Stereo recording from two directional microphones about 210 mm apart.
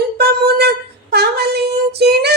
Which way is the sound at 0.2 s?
50° right (ahead or behind).